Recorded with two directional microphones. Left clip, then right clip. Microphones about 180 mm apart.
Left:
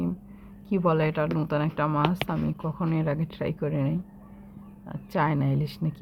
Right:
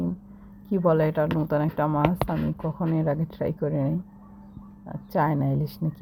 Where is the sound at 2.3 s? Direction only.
Centre (ahead or behind).